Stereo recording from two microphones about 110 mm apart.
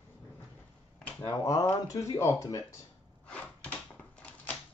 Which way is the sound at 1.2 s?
30° left (ahead or behind).